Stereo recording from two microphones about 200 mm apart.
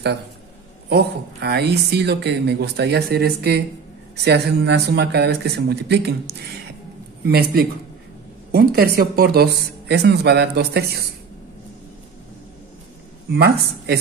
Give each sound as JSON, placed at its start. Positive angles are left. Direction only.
{"t": 0.8, "sound": "speech", "side_deg": -55}